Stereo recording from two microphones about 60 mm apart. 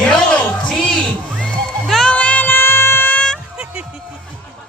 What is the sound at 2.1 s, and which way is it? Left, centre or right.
Music, left.